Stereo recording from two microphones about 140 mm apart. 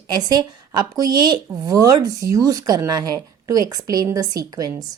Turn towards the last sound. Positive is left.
turn(degrees=-25)  # may be behind; listen again after turning